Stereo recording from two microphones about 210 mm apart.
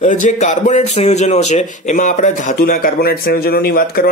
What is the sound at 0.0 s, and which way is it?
A man's voice, 35° left (ahead or behind).